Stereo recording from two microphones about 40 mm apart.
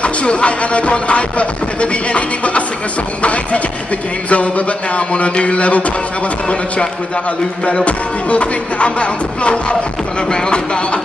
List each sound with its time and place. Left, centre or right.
0.0 s speech: left
7.8 s speech: left
10.3 s music: left